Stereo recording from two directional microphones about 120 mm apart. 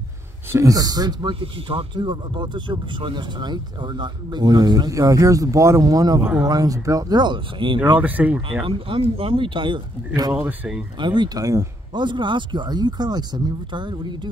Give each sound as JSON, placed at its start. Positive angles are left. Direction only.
{"t": 0.5, "sound": "speech", "side_deg": -25}
{"t": 1.4, "sound": "speech", "side_deg": -50}
{"t": 2.0, "sound": "speech", "side_deg": -40}
{"t": 8.0, "sound": "speech", "side_deg": -10}
{"t": 8.6, "sound": "speech", "side_deg": -50}
{"t": 10.3, "sound": "speech", "side_deg": -10}
{"t": 11.0, "sound": "speech", "side_deg": -40}